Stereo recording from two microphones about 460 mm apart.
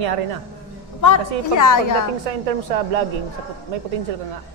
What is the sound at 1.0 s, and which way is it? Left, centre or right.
Speech, left.